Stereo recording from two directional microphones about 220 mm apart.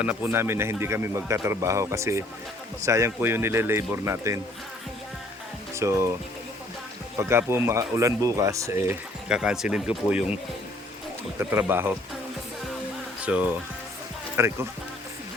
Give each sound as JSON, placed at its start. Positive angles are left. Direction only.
{"t": 0.0, "sound": "speech", "side_deg": -10}
{"t": 5.7, "sound": "speech", "side_deg": -15}
{"t": 7.2, "sound": "speech", "side_deg": -10}
{"t": 11.3, "sound": "speech", "side_deg": -10}
{"t": 13.2, "sound": "speech", "side_deg": -5}